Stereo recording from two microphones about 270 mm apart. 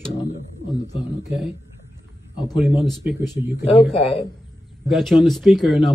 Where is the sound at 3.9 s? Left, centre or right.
Left.